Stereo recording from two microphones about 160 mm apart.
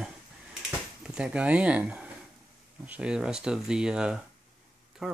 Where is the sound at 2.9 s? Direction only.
5° right (ahead or behind).